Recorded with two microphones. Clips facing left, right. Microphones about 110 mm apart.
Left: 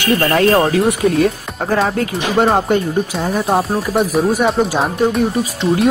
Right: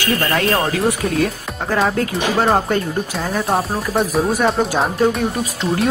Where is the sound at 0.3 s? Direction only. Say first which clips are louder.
Left 7 dB; 35° left (ahead or behind).